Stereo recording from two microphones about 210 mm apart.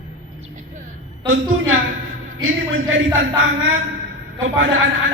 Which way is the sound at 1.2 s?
70° right (ahead or behind).